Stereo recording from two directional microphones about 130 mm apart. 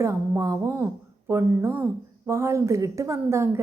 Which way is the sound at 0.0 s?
25° right (ahead or behind).